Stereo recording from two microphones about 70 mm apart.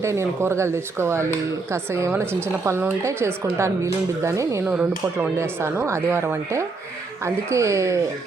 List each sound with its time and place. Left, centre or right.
0.0 s speech: right
4.6 s speech: right
5.4 s speech: right